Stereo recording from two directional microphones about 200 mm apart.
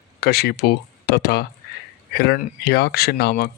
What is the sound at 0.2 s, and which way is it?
Speech, 55° left (ahead or behind).